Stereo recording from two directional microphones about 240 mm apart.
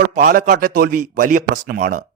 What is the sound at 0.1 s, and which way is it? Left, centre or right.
A man's voice, right.